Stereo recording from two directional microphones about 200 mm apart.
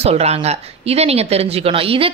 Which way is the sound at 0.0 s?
30° right (ahead or behind).